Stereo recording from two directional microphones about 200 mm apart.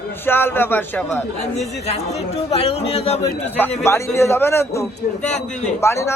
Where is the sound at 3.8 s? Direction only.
15° left (ahead or behind).